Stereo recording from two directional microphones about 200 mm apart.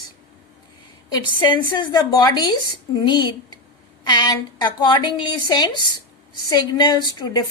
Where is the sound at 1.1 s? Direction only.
25° left (ahead or behind).